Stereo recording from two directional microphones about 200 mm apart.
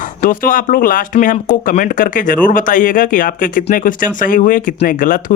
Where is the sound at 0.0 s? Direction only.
45° left (ahead or behind).